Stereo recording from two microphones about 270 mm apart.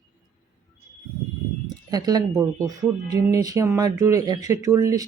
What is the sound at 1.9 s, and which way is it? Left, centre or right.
Speech, centre.